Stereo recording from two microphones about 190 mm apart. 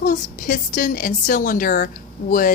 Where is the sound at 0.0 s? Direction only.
45° left (ahead or behind).